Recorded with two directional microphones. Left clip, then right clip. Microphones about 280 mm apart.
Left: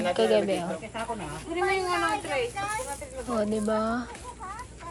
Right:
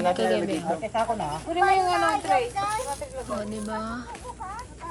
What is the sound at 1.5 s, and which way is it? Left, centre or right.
Speech, right.